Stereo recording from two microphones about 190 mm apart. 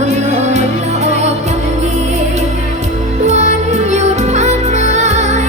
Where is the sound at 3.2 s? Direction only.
35° right (ahead or behind).